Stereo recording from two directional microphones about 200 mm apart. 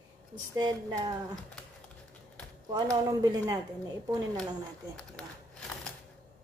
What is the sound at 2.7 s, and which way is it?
Speech, 20° right (ahead or behind).